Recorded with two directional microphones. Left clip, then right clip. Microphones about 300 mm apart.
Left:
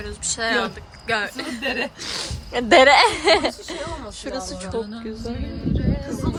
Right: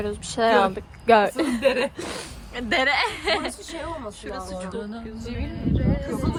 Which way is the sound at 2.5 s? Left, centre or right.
Centre.